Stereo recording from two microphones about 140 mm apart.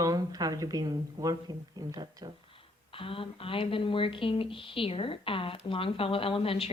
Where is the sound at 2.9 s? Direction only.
40° left (ahead or behind).